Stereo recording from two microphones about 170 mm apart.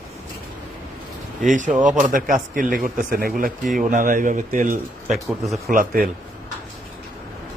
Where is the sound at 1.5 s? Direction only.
50° right (ahead or behind).